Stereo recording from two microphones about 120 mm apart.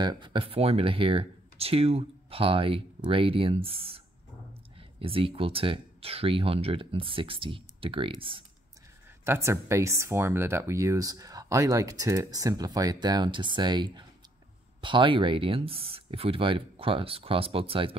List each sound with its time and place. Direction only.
0.0 s speech: 40° right (ahead or behind)
5.0 s speech: 50° right (ahead or behind)
9.2 s speech: 20° right (ahead or behind); by 17.9 s 50° right (ahead or behind)